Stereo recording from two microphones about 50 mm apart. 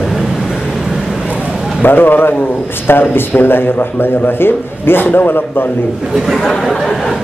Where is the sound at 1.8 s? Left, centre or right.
Left.